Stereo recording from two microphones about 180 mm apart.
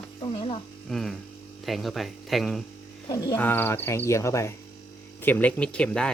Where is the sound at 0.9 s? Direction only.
Centre (ahead or behind).